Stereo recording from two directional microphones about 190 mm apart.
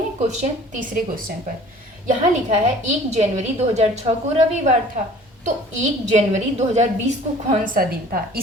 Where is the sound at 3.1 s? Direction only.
35° right (ahead or behind).